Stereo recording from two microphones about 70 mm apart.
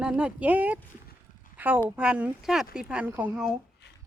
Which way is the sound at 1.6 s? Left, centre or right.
Right.